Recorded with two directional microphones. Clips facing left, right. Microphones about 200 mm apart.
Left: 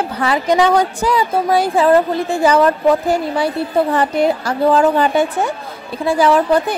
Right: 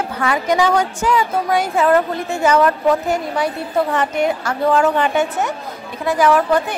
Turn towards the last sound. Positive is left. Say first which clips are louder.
# left 2 dB
turn(degrees=30)  # may be behind; listen again after turning